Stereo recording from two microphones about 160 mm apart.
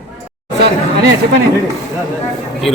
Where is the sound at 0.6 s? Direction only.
90° right.